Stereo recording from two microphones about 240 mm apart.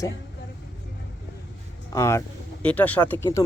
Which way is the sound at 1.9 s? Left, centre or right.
Centre.